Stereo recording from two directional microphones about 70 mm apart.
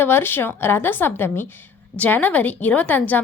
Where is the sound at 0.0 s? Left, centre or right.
Left.